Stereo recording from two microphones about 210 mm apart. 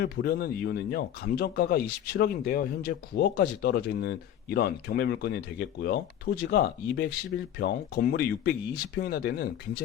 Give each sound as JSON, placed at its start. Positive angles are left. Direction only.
{"t": 0.0, "sound": "speech", "side_deg": 50}